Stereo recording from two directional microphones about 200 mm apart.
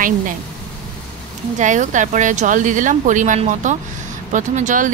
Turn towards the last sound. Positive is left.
turn(degrees=-40)  # may be behind; listen again after turning